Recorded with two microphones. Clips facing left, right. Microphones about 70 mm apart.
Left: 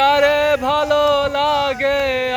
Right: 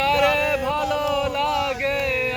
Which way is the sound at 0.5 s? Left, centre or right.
Left.